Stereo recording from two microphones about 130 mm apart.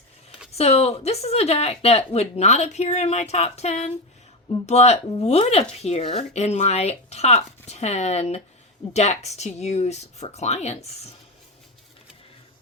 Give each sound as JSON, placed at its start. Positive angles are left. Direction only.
{"t": 0.5, "sound": "a woman's voice", "side_deg": 50}